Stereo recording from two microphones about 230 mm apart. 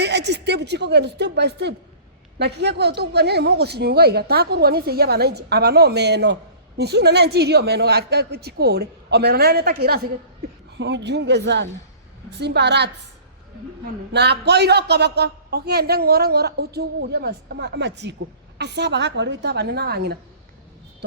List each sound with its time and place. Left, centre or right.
0.0 s a man's voice: right
10.8 s a man's voice: right
14.1 s a man's voice: right